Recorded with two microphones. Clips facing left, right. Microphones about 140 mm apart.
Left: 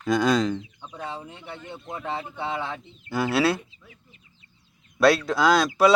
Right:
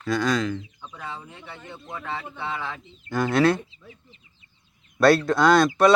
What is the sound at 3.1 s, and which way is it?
Speech, 10° left (ahead or behind).